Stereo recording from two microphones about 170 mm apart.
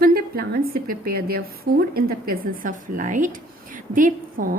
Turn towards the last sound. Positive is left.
turn(degrees=-55)  # may be behind; listen again after turning